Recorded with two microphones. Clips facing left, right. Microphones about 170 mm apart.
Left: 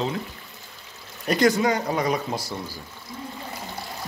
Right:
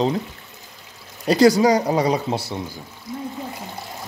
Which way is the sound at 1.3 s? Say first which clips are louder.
Right 6 dB; 35° right (ahead or behind).